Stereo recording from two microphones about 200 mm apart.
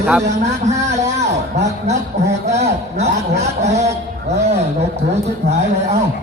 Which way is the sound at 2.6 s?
35° right (ahead or behind).